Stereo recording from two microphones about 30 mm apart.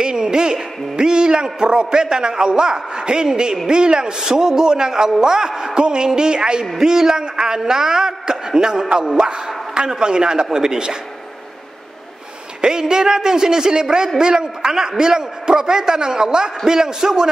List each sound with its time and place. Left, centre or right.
0.0 s a man's voice: right
12.6 s a man's voice: right